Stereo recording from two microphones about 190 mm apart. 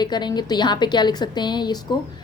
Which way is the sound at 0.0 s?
20° left (ahead or behind).